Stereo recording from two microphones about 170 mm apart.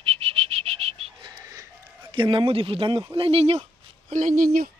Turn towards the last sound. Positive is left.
turn(degrees=-55)  # may be behind; listen again after turning